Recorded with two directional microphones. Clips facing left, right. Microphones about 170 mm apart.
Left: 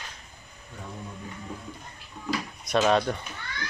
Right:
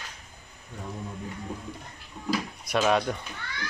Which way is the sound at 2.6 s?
10° right (ahead or behind).